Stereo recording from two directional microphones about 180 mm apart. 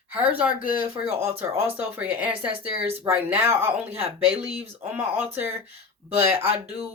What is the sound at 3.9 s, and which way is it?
Speech, 30° right (ahead or behind).